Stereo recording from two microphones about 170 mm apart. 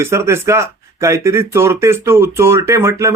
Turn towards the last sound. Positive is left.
turn(degrees=-15)  # may be behind; listen again after turning